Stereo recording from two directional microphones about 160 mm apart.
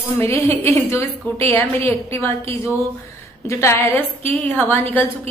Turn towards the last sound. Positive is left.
turn(degrees=10)  # may be behind; listen again after turning